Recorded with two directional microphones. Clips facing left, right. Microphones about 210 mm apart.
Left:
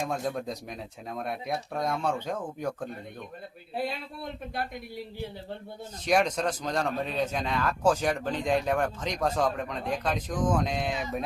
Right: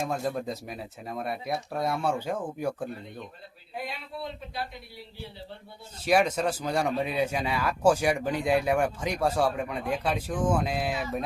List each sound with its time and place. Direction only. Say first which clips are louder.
0.0 s speech: right 1 dB; 5° right (ahead or behind)
4.2 s speech: even; 50° left (ahead or behind)
6.1 s speech: right 1 dB; 5° right (ahead or behind)